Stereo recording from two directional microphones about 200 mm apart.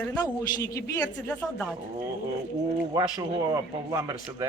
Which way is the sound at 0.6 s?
15° left (ahead or behind).